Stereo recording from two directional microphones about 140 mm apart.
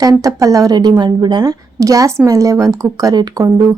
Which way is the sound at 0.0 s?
25° right (ahead or behind).